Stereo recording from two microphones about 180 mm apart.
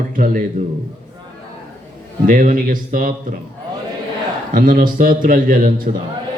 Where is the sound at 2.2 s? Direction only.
50° right (ahead or behind).